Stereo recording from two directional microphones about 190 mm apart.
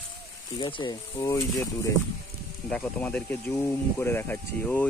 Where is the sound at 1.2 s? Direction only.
15° left (ahead or behind).